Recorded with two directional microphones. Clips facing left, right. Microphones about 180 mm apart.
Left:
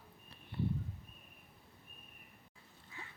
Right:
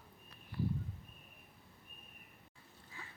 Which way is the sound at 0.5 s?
25° left (ahead or behind).